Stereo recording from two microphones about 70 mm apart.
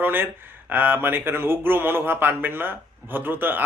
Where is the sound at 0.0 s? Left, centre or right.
Right.